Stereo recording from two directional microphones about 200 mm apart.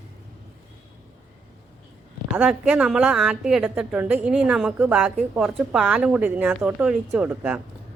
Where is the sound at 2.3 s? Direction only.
5° right (ahead or behind).